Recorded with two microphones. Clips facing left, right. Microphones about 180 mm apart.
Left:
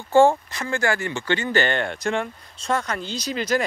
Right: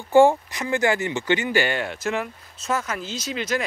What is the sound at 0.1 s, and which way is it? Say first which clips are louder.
Speech: right 1 dB; 15° right (ahead or behind).